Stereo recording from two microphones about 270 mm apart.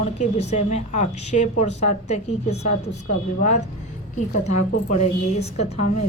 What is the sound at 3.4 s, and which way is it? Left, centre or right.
Speech, left.